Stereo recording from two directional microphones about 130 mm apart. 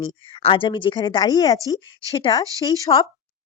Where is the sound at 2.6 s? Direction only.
35° left (ahead or behind).